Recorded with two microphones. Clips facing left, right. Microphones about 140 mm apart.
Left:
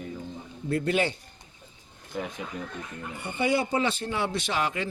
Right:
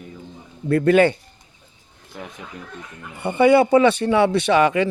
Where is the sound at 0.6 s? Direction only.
65° right (ahead or behind).